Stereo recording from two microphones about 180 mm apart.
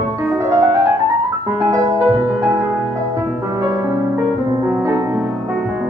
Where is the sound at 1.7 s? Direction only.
20° right (ahead or behind).